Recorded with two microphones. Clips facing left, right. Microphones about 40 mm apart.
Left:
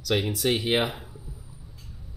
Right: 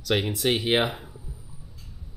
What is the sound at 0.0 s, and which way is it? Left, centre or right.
Speech, centre.